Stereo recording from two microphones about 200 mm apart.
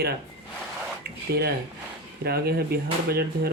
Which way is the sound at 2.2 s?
50° right (ahead or behind).